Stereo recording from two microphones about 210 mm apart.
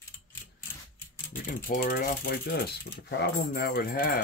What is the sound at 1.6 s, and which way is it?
Speech, 45° left (ahead or behind).